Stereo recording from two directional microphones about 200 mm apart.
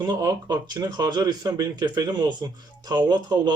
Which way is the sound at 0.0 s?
20° right (ahead or behind).